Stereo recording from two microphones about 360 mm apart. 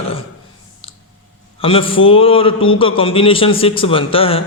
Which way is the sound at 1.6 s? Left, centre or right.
Centre.